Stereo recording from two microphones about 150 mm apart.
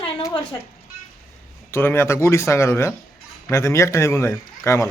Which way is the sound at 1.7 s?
15° left (ahead or behind).